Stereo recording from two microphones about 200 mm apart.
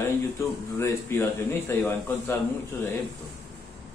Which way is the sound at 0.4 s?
15° left (ahead or behind).